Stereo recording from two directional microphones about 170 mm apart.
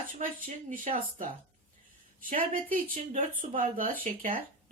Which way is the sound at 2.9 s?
50° right (ahead or behind).